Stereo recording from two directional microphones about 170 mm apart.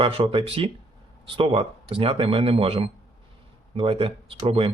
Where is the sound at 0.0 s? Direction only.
30° right (ahead or behind).